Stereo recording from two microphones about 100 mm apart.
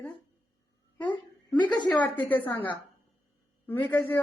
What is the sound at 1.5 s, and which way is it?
Speech, 50° left (ahead or behind).